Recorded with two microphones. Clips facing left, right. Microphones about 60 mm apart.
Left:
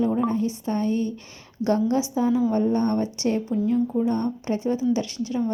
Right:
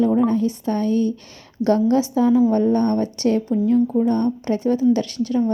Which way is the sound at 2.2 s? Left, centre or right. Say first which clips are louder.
Right 5 dB; right.